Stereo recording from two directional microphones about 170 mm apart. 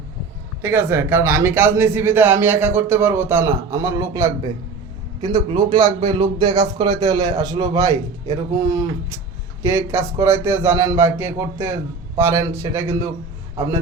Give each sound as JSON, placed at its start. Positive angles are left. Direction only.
{"t": 0.6, "sound": "a man's voice", "side_deg": -15}
{"t": 5.5, "sound": "a man's voice", "side_deg": -45}
{"t": 6.1, "sound": "a man's voice", "side_deg": -30}